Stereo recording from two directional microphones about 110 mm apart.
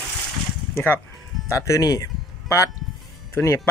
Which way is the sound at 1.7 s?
30° left (ahead or behind).